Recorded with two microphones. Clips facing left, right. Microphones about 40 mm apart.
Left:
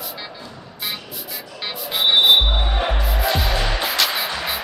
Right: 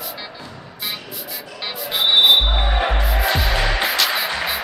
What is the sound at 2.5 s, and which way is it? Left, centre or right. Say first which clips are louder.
Music: right 2 dB; right.